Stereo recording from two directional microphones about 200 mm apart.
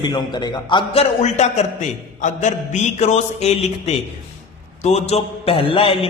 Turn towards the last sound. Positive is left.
turn(degrees=30)  # may be behind; listen again after turning